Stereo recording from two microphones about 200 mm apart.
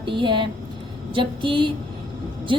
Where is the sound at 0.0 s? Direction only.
25° right (ahead or behind).